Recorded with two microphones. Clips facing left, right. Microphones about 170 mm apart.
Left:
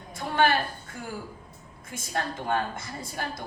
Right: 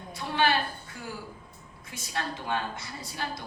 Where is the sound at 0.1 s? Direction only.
50° left (ahead or behind).